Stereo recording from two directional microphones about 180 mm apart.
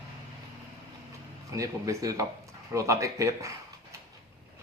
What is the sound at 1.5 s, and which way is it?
Speech, 15° right (ahead or behind).